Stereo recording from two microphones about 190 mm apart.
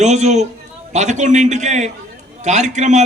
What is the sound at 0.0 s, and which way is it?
A man's voice, 40° right (ahead or behind).